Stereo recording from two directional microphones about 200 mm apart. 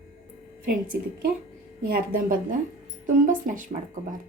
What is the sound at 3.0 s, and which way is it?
Speech, 40° right (ahead or behind).